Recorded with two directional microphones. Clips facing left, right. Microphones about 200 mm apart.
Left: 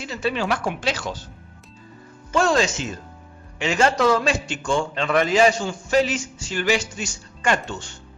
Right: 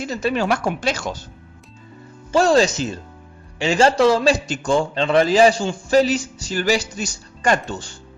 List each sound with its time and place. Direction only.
0.0 s speech: 45° right (ahead or behind)
2.3 s a man's voice: 35° right (ahead or behind)